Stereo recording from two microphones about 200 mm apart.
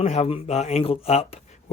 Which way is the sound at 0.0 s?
30° left (ahead or behind).